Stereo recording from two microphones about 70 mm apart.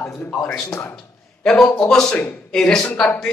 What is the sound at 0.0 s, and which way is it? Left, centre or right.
Speech, left.